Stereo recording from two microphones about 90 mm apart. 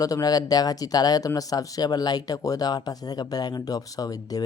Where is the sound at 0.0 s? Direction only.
45° left (ahead or behind).